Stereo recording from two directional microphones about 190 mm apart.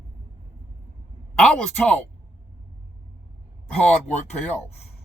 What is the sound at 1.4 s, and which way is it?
Speech, 5° left (ahead or behind).